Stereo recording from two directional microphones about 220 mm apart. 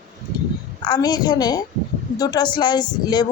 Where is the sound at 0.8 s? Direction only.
20° left (ahead or behind).